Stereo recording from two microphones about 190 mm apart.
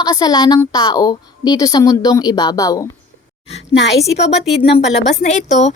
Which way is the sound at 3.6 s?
65° left (ahead or behind).